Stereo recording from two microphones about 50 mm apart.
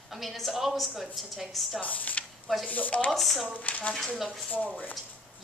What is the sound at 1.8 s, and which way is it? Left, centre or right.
Speech, left.